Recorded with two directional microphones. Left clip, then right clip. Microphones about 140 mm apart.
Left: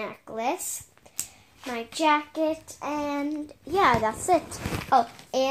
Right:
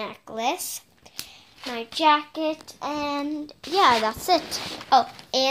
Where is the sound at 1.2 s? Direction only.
55° right (ahead or behind).